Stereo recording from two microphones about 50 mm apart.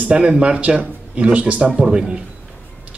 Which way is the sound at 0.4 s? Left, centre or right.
Right.